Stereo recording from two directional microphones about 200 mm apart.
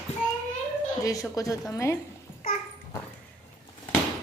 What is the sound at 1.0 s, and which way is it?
Speech, 15° left (ahead or behind).